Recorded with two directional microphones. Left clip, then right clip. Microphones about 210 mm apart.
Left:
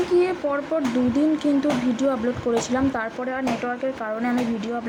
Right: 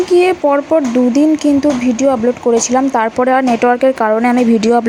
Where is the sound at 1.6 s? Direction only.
25° right (ahead or behind).